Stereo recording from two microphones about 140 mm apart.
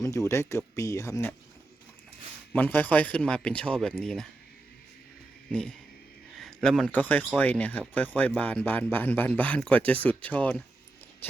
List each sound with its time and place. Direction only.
0.0 s speech: 20° left (ahead or behind)
2.5 s speech: 15° left (ahead or behind)
5.5 s a sound: 5° left (ahead or behind)
6.4 s speech: 5° left (ahead or behind)